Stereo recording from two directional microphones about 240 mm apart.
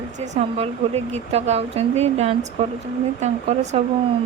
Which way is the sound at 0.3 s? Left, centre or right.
Right.